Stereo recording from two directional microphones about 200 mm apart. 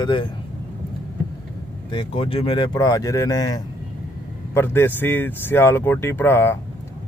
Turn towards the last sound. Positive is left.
turn(degrees=10)  # may be behind; listen again after turning